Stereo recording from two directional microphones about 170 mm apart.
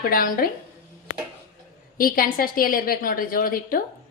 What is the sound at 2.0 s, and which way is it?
A woman's voice, 55° left (ahead or behind).